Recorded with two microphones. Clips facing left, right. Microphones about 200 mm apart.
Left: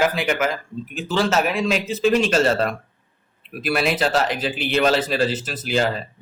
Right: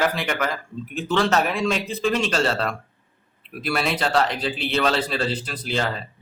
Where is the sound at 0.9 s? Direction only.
Centre (ahead or behind).